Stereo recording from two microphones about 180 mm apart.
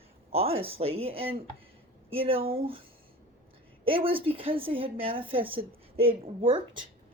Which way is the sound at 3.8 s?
30° right (ahead or behind).